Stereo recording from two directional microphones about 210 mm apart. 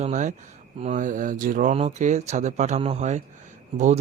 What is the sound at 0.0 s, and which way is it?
Speech, 35° right (ahead or behind).